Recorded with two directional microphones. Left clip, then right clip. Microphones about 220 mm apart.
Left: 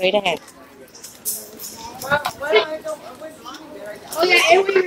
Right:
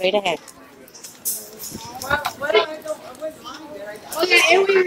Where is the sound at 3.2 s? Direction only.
50° right (ahead or behind).